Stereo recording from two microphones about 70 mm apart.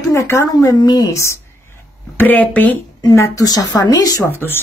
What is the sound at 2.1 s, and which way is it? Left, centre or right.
Speech, left.